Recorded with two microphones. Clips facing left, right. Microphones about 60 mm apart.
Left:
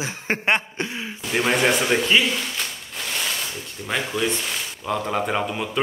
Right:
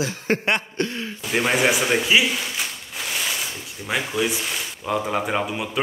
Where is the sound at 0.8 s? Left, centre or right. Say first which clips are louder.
Right 3 dB; centre.